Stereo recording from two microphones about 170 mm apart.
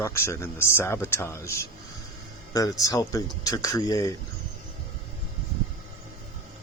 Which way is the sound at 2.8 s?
20° left (ahead or behind).